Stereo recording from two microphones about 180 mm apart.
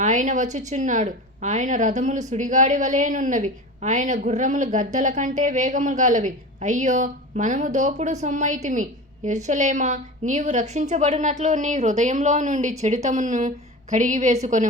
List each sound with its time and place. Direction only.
0.0 s a woman's voice: 45° right (ahead or behind)